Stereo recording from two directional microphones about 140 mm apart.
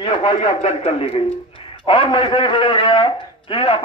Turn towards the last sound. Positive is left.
turn(degrees=40)  # may be behind; listen again after turning